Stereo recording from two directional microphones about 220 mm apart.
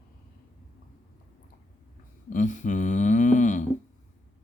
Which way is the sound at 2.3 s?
35° left (ahead or behind).